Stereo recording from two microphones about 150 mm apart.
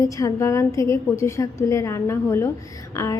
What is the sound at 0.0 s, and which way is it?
A woman's voice, 20° left (ahead or behind).